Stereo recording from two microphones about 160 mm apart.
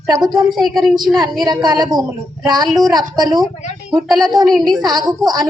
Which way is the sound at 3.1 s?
25° right (ahead or behind).